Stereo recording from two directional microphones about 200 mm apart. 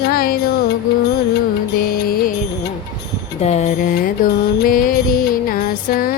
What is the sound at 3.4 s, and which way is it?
Music, 35° left (ahead or behind).